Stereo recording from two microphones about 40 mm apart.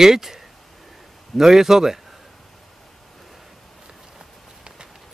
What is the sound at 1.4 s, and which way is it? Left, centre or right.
Speech, centre.